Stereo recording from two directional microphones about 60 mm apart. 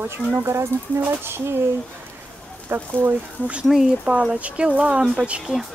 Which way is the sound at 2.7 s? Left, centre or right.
Right.